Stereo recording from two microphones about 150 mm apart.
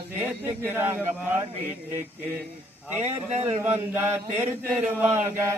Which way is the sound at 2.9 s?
50° right (ahead or behind).